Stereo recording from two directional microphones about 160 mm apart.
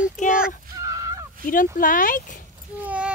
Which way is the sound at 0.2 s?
50° left (ahead or behind).